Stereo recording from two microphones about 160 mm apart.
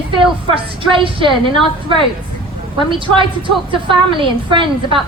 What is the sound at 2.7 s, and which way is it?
A woman's voice, 30° right (ahead or behind).